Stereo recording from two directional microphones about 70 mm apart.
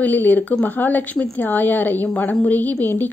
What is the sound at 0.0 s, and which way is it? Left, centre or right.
A woman's voice, left.